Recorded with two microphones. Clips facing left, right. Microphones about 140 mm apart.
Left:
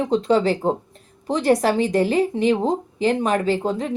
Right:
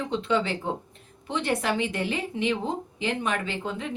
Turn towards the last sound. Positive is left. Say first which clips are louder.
# left 10 dB
turn(degrees=40)  # may be behind; listen again after turning